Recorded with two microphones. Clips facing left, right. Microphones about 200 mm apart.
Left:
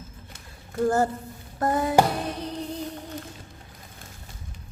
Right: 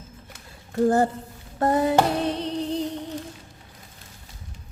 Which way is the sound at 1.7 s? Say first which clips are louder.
Right 4 dB; 30° right (ahead or behind).